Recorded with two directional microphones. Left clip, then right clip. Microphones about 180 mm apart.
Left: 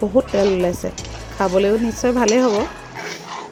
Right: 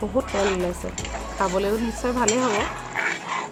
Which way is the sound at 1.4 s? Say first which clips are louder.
Left 7 dB; 40° left (ahead or behind).